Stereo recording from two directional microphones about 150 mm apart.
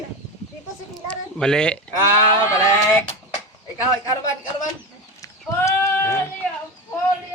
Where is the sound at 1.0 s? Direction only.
5° left (ahead or behind).